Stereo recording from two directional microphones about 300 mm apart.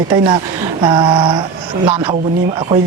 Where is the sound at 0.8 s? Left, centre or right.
Centre.